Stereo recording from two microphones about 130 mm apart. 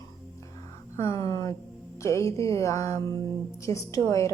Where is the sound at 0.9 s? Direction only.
25° left (ahead or behind).